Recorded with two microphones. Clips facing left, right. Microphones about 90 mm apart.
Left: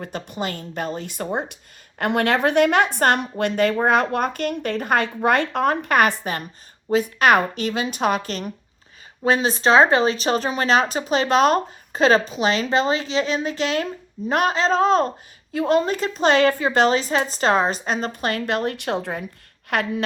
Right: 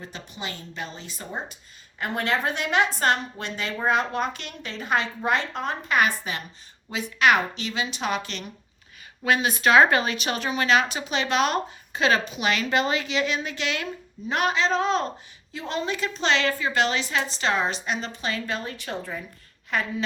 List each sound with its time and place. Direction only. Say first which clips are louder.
0.0 s a woman's voice: left 8 dB; 50° left (ahead or behind)
9.2 s a woman's voice: left 3 dB; 30° left (ahead or behind); by 20.1 s 65° left (ahead or behind)